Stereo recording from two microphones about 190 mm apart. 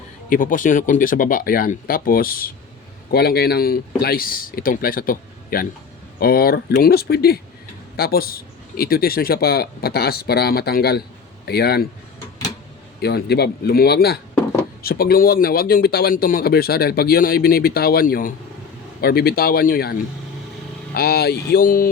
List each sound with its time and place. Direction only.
0.3 s a man's voice: 45° left (ahead or behind)
13.0 s a man's voice: 60° left (ahead or behind)